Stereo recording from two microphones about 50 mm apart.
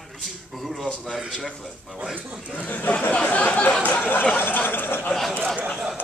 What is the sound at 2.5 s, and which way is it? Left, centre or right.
Speech, left.